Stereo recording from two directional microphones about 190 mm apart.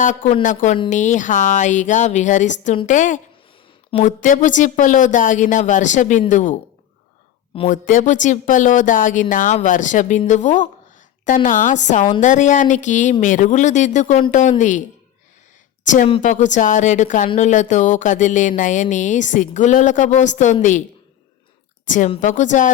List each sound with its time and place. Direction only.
0.0 s speech: 40° left (ahead or behind)
7.7 s speech: 40° left (ahead or behind)
21.8 s a woman's voice: 40° left (ahead or behind)